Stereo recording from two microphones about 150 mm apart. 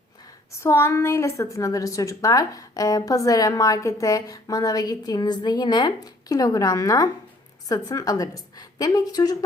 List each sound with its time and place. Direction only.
0.6 s a woman's voice: 20° left (ahead or behind)